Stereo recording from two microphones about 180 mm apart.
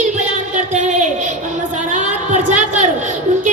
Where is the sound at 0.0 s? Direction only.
40° right (ahead or behind).